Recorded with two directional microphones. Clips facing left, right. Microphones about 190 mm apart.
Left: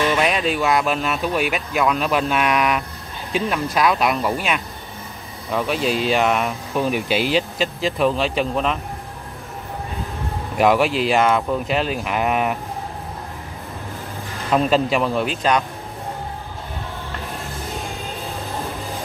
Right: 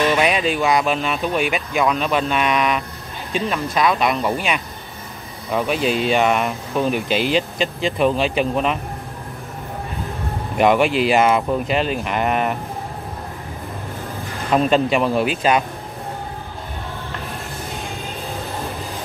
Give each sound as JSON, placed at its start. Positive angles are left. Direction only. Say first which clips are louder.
{"t": 0.1, "sound": "speech", "louder": "right 1 dB", "side_deg": 0}
{"t": 10.6, "sound": "speech", "louder": "right 1 dB", "side_deg": 0}
{"t": 14.5, "sound": "speech", "louder": "right 1 dB", "side_deg": 0}